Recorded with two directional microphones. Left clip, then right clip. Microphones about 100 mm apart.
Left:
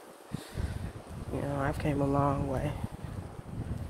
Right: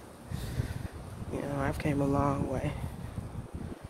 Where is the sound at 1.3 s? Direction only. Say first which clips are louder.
Left 1 dB; 40° right (ahead or behind).